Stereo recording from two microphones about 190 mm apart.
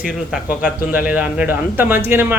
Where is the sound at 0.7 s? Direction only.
50° left (ahead or behind).